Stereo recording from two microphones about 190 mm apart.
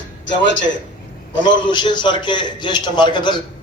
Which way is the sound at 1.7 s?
25° left (ahead or behind).